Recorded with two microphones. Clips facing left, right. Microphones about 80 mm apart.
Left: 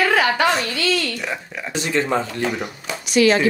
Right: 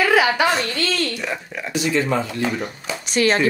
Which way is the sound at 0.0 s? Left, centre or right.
Centre.